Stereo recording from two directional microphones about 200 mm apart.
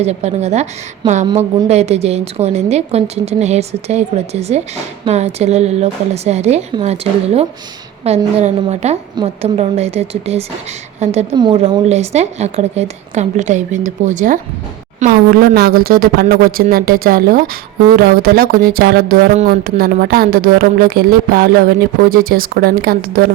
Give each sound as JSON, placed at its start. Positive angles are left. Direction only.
{"t": 0.0, "sound": "a woman's voice", "side_deg": -35}